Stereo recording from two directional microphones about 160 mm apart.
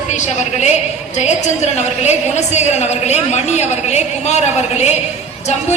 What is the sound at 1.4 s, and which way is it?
A woman's voice, 45° left (ahead or behind).